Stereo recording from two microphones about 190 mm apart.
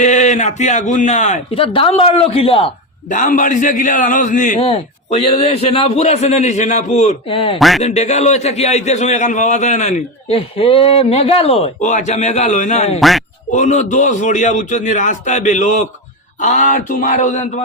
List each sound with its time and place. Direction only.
0.0 s a man's voice: 40° left (ahead or behind)
3.1 s a man's voice: 40° left (ahead or behind)
13.0 s speech: centre (ahead or behind)
13.5 s a man's voice: 40° left (ahead or behind)